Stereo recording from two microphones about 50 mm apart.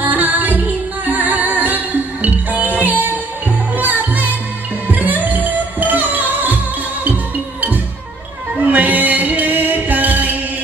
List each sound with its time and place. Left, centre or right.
0.0 s music: right
8.6 s music: right